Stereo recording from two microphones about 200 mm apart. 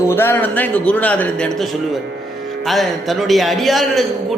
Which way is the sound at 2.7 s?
Centre (ahead or behind).